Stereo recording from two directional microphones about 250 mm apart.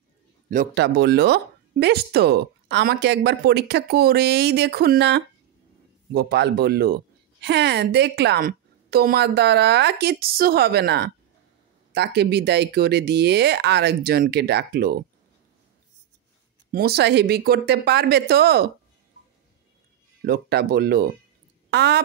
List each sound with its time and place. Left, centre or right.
0.5 s speech: right
16.7 s speech: right
20.2 s speech: right